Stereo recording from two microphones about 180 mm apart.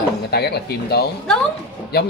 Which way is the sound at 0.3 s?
65° left (ahead or behind).